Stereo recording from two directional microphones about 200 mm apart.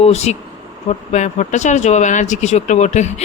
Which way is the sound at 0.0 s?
30° left (ahead or behind).